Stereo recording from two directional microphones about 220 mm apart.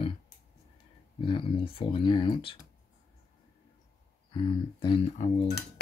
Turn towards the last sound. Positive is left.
turn(degrees=25)  # may be behind; listen again after turning